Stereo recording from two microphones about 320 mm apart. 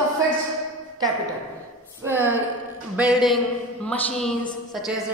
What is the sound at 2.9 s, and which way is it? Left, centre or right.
A woman's voice, centre.